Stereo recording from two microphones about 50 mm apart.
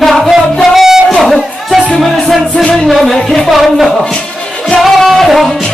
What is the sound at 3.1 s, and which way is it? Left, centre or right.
Music, centre.